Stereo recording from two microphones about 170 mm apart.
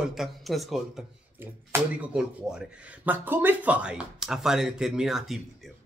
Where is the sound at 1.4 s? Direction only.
10° right (ahead or behind).